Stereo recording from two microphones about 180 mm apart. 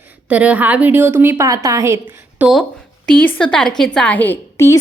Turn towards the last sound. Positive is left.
turn(degrees=15)  # may be behind; listen again after turning